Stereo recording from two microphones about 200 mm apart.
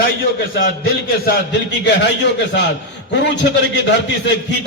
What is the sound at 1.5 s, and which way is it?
A man's voice, 60° left (ahead or behind).